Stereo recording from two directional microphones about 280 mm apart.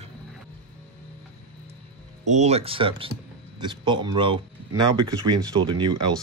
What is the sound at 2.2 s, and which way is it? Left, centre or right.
Speech, right.